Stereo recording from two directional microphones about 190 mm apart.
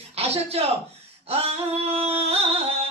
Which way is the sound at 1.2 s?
30° right (ahead or behind).